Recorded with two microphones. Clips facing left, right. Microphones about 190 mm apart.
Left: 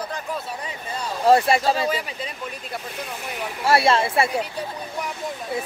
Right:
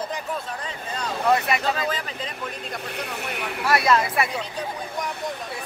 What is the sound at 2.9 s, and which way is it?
Speech, 65° right (ahead or behind).